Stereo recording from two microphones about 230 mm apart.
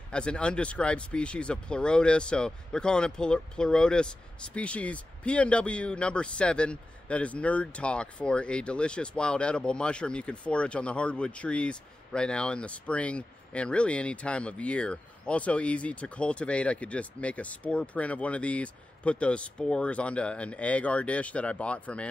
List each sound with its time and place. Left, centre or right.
0.1 s speech: centre